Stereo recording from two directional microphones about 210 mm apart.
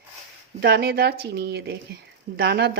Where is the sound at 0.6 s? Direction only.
50° right (ahead or behind).